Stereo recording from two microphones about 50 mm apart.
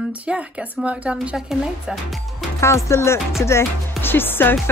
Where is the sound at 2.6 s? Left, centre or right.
Left.